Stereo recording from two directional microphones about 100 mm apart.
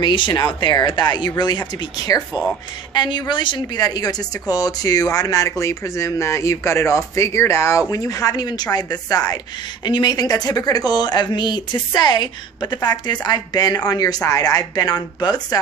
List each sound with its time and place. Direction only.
0.0 s speech: 50° left (ahead or behind)